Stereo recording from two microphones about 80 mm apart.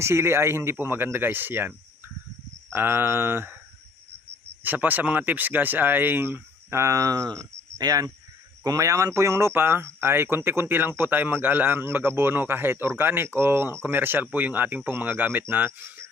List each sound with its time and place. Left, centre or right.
0.0 s speech: right
2.7 s speech: right
4.6 s speech: right